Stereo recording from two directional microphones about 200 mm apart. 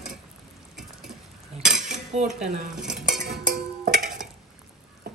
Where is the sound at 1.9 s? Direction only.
35° right (ahead or behind).